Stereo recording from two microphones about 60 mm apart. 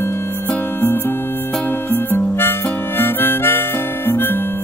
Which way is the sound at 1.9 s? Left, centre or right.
Left.